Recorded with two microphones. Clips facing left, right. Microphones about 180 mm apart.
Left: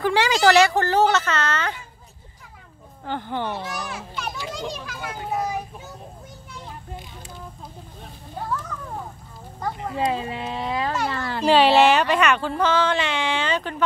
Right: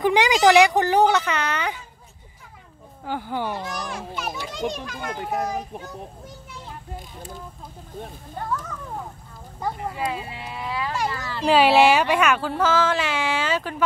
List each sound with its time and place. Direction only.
0.0 s speech: 15° right (ahead or behind)
3.1 s speech: 10° right (ahead or behind)
3.5 s speech: 5° left (ahead or behind)
8.4 s speech: centre (ahead or behind)
9.9 s speech: 30° left (ahead or behind)
11.1 s speech: 60° left (ahead or behind)
11.4 s speech: 5° right (ahead or behind)